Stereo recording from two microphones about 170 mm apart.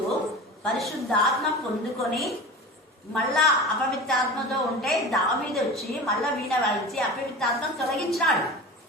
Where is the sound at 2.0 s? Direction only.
Centre (ahead or behind).